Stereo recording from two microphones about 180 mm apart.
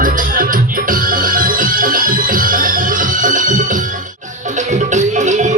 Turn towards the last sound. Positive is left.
turn(degrees=-40)  # may be behind; listen again after turning